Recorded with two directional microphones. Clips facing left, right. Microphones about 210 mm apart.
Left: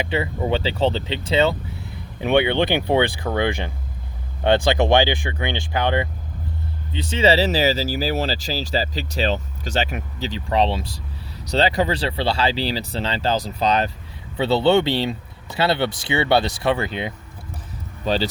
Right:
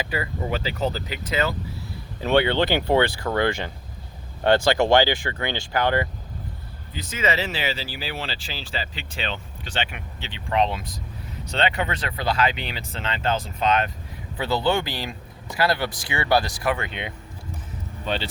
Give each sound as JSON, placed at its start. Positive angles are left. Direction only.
{"t": 0.0, "sound": "speech", "side_deg": 25}
{"t": 2.2, "sound": "speech", "side_deg": 15}
{"t": 6.9, "sound": "speech", "side_deg": 30}